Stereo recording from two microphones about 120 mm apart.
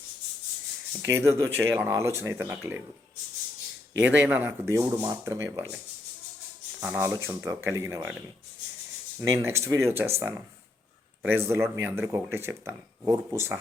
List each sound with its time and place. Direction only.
1.1 s speech: 25° right (ahead or behind)
4.0 s speech: 15° right (ahead or behind)
6.7 s speech: 20° right (ahead or behind)
9.2 s speech: 25° right (ahead or behind)